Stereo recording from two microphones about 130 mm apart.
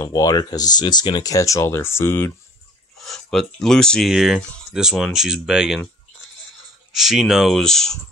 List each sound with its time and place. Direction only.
0.0 s speech: 30° left (ahead or behind)
3.0 s speech: centre (ahead or behind)
6.9 s speech: 5° right (ahead or behind)